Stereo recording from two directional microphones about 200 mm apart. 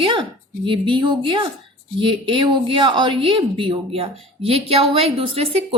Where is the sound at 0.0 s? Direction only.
25° right (ahead or behind).